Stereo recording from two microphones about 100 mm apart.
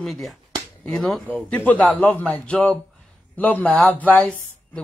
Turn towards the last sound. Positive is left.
turn(degrees=10)  # may be behind; listen again after turning